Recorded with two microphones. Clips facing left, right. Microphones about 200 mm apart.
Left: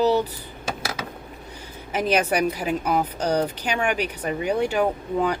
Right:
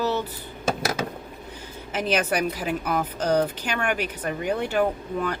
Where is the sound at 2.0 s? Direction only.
10° left (ahead or behind).